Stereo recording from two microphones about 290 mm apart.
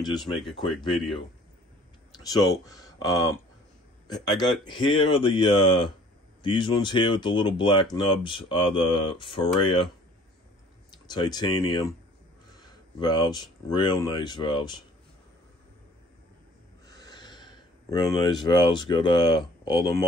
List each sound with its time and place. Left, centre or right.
0.0 s speech: centre
0.3 s speech: centre
2.1 s speech: centre
10.9 s speech: centre
13.0 s speech: centre
16.8 s a sound: centre
19.6 s speech: centre